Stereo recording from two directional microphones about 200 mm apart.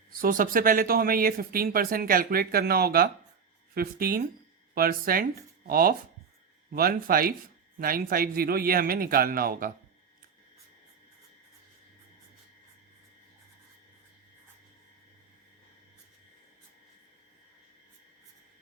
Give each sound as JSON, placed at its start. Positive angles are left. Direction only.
{"t": 0.2, "sound": "speech", "side_deg": -45}